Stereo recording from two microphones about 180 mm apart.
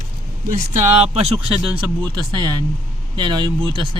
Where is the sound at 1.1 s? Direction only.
30° right (ahead or behind).